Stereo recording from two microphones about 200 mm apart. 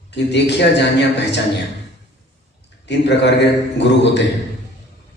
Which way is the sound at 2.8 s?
60° left (ahead or behind).